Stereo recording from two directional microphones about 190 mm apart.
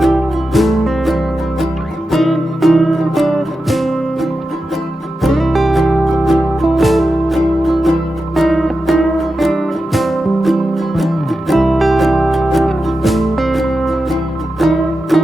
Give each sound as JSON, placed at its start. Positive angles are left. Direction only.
{"t": 0.0, "sound": "music", "side_deg": 0}